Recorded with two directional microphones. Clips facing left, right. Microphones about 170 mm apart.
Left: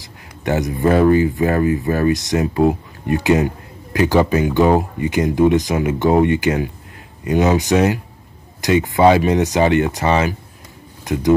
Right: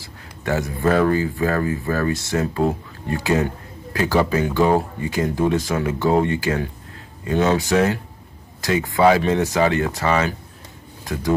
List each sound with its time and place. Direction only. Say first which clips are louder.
0.0 s speech: left 4 dB; 20° left (ahead or behind)